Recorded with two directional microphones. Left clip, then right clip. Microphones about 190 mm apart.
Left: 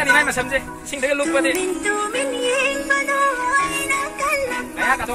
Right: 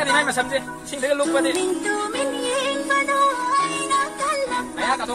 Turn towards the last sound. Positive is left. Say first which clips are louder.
# left 3 dB
turn(degrees=10)  # may be behind; listen again after turning